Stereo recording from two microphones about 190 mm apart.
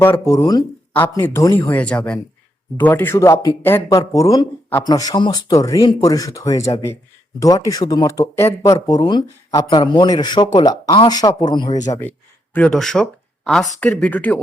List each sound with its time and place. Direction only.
0.0 s speech: 10° left (ahead or behind)
11.9 s speech: 10° left (ahead or behind)